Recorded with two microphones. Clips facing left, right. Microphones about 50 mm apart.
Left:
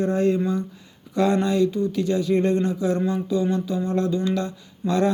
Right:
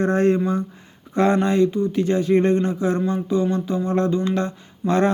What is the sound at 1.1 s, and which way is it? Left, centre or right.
Speech, right.